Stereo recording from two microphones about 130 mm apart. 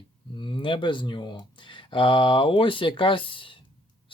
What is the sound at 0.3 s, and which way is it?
Speech, 40° left (ahead or behind).